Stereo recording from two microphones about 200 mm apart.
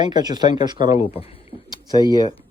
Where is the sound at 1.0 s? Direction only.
30° left (ahead or behind).